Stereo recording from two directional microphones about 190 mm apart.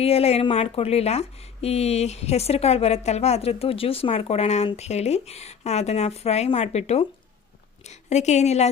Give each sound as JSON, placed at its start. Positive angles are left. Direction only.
{"t": 0.0, "sound": "speech", "side_deg": 30}